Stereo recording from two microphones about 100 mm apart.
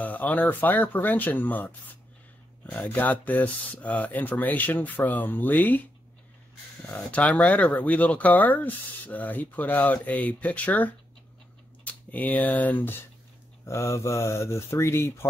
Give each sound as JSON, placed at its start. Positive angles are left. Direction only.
{"t": 0.0, "sound": "speech", "side_deg": 15}
{"t": 6.9, "sound": "speech", "side_deg": 15}
{"t": 13.7, "sound": "speech", "side_deg": 30}